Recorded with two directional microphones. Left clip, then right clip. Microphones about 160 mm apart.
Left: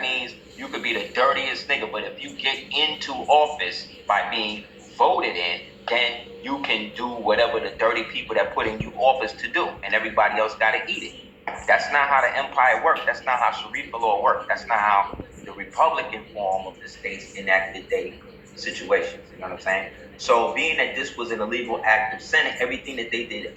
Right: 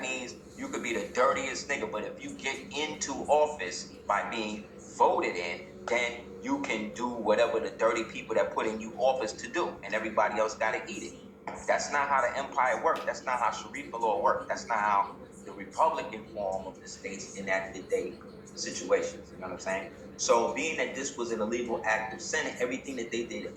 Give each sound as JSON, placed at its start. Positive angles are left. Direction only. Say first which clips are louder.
{"t": 0.0, "sound": "a man's voice", "louder": "left 10 dB", "side_deg": -20}